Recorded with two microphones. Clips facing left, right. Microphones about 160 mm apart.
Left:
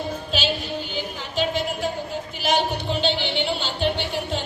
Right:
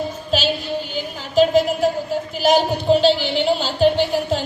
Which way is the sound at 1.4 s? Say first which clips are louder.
Right 10 dB; 40° right (ahead or behind).